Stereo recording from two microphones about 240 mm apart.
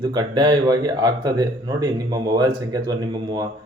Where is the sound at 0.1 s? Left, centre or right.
Centre.